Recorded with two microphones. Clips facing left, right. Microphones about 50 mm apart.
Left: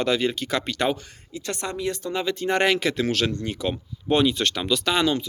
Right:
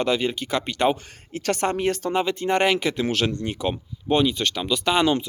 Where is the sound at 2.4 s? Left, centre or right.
Centre.